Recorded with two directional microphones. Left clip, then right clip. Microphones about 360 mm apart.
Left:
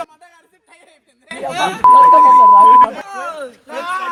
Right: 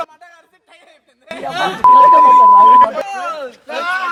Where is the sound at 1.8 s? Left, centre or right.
Centre.